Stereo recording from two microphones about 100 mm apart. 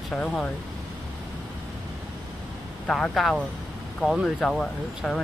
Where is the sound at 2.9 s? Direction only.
5° left (ahead or behind).